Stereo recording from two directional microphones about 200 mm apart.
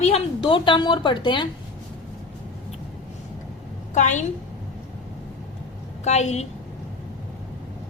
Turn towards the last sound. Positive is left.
turn(degrees=35)  # may be behind; listen again after turning